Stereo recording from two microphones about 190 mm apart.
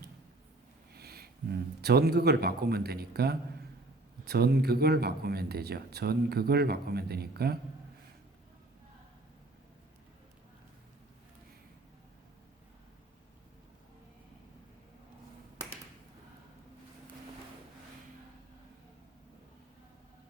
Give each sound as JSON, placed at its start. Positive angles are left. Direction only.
{"t": 0.9, "sound": "speech", "side_deg": -55}